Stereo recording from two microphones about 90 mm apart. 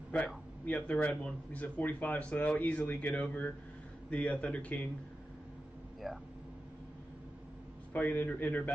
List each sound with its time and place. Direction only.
0.7 s speech: 15° left (ahead or behind)
6.0 s speech: centre (ahead or behind)
7.9 s a man's voice: 20° left (ahead or behind)